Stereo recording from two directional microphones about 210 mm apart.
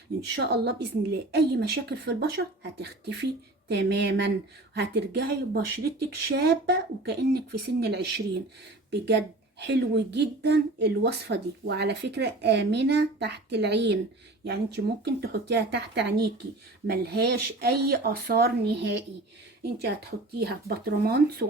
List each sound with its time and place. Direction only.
0.3 s speech: 50° right (ahead or behind)
9.6 s speech: 55° right (ahead or behind)